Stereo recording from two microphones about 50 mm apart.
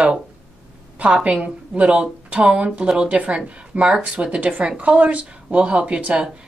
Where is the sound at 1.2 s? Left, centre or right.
Right.